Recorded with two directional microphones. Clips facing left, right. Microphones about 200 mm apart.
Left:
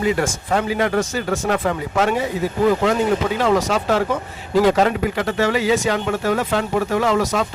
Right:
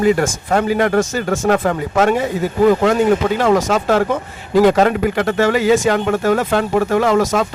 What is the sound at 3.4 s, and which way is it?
Speech, 50° right (ahead or behind).